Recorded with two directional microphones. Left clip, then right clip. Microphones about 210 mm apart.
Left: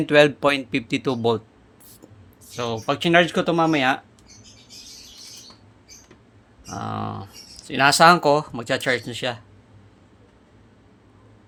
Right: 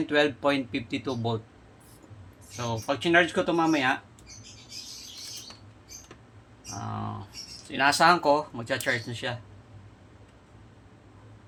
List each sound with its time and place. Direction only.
0.0 s speech: 50° left (ahead or behind)
2.6 s speech: 55° left (ahead or behind)
6.7 s speech: 55° left (ahead or behind)